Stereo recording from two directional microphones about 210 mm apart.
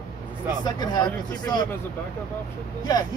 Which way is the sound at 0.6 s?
20° left (ahead or behind).